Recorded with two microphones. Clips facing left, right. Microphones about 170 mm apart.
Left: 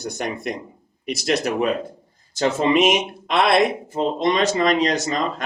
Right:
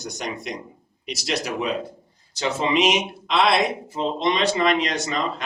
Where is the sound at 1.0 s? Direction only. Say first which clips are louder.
Left 5 dB; 50° left (ahead or behind).